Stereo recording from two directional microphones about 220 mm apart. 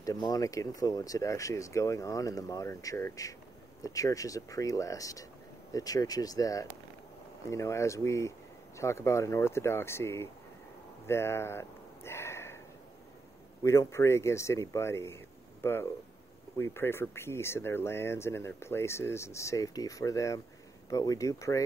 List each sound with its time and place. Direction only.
0.0 s speech: 15° left (ahead or behind)
11.1 s a sound: 10° left (ahead or behind)
13.6 s speech: 15° left (ahead or behind)